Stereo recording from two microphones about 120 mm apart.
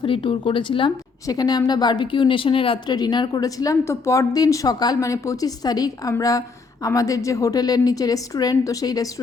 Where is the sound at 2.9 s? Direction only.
35° left (ahead or behind).